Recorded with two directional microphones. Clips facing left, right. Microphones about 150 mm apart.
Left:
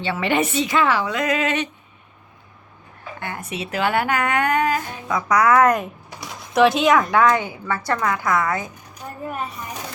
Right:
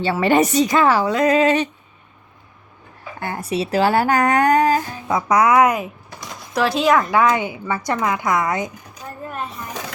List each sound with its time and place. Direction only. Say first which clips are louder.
0.0 s speech: right 5 dB; 40° right (ahead or behind)
3.2 s speech: right 7 dB; 35° right (ahead or behind); by 8.7 s 20° right (ahead or behind)